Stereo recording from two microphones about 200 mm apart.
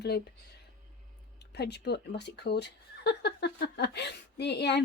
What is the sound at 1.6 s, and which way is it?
Speech, 55° left (ahead or behind).